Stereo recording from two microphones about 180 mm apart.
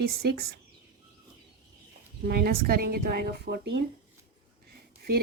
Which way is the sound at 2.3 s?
60° right (ahead or behind).